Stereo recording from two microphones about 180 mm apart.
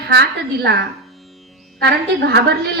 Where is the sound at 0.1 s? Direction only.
65° right (ahead or behind).